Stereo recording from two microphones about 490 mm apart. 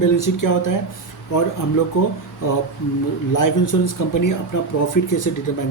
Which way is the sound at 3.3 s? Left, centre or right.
Left.